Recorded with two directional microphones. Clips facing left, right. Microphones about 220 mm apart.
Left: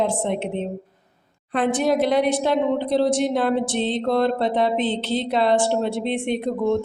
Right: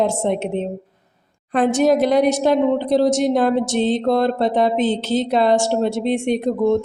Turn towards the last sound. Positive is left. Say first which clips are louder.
# right 4 dB
turn(degrees=-40)  # may be behind; listen again after turning